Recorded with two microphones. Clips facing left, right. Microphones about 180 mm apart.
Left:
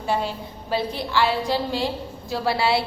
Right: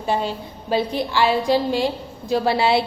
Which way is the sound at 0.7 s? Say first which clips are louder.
Right 3 dB; 15° right (ahead or behind).